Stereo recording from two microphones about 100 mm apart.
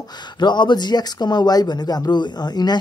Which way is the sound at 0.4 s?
50° left (ahead or behind).